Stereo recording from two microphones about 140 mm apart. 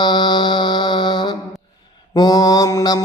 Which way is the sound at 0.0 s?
35° left (ahead or behind).